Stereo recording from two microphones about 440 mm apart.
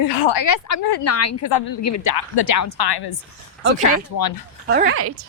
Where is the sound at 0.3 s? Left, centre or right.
Left.